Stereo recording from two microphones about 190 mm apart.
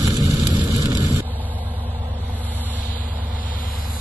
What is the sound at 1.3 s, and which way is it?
Vehicle, 10° left (ahead or behind).